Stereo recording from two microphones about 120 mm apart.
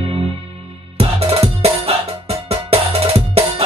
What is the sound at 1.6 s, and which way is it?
Music, 60° right (ahead or behind).